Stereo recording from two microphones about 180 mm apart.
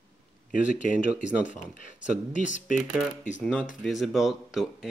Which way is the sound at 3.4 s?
5° left (ahead or behind).